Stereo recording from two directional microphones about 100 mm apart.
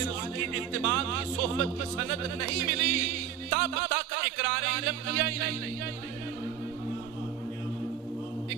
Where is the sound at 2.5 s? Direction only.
35° right (ahead or behind).